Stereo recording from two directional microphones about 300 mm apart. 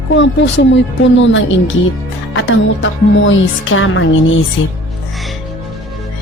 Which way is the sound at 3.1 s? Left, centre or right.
Left.